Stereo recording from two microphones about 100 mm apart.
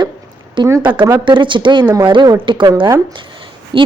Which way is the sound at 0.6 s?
55° right (ahead or behind).